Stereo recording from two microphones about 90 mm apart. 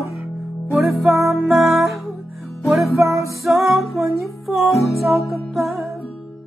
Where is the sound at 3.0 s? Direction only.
35° right (ahead or behind).